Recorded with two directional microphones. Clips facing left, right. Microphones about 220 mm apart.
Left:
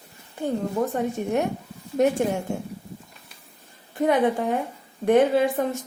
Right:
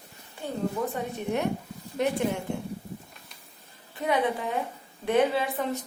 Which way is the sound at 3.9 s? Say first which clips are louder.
Left 6 dB; 45° left (ahead or behind).